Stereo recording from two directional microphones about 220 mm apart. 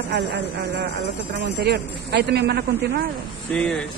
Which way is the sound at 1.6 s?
50° right (ahead or behind).